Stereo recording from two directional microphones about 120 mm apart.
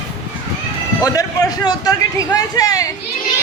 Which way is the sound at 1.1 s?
30° left (ahead or behind).